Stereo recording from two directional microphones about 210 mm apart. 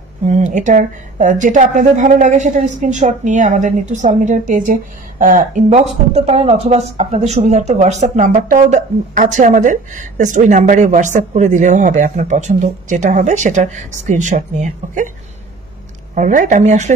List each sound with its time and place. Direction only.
0.3 s speech: 35° right (ahead or behind)
16.2 s speech: 40° right (ahead or behind)